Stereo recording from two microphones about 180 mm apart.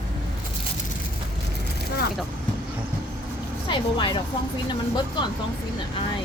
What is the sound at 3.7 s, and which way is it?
Speech, 25° left (ahead or behind).